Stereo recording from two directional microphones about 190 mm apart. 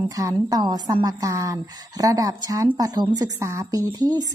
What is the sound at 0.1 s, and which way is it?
A woman's voice, 20° right (ahead or behind).